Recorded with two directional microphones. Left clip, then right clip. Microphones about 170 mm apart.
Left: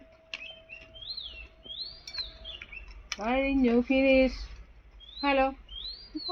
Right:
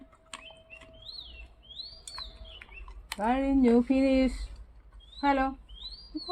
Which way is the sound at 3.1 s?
40° right (ahead or behind).